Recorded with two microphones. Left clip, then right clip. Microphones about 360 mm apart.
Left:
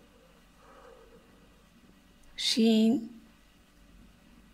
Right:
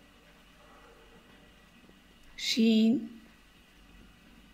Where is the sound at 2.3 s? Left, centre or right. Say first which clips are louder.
Left 1 dB; left.